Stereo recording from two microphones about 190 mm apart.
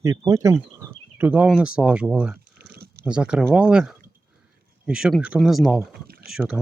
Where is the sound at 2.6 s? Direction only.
55° right (ahead or behind).